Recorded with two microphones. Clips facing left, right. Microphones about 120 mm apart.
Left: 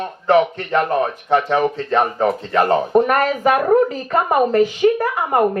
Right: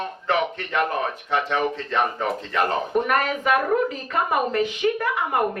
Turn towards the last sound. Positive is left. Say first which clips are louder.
# left 6 dB
turn(degrees=40)  # may be behind; listen again after turning